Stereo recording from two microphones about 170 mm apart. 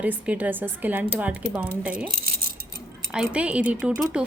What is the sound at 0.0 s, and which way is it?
A woman's voice, 10° right (ahead or behind).